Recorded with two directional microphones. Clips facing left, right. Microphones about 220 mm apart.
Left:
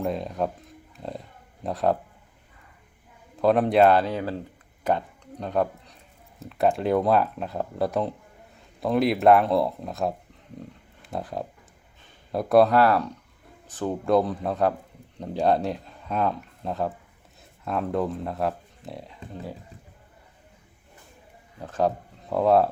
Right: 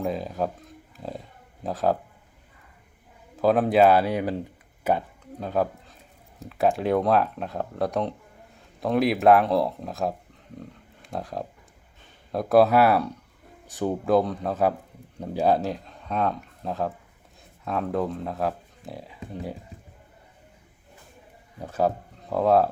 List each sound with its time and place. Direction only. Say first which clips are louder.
0.0 s speech: even; centre (ahead or behind)
3.4 s speech: even; centre (ahead or behind)
21.6 s speech: even; 5° right (ahead or behind)